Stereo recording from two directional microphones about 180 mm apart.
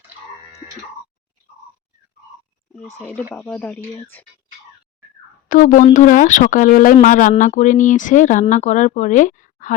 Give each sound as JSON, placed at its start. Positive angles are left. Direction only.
{"t": 3.3, "sound": "speech", "side_deg": 10}
{"t": 5.5, "sound": "speech", "side_deg": 50}